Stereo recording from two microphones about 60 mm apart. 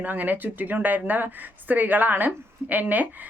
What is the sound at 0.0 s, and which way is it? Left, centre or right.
Speech, right.